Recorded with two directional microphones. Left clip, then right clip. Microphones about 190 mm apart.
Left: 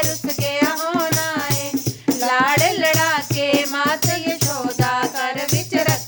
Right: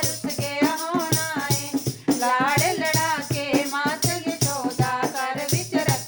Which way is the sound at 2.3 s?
45° left (ahead or behind).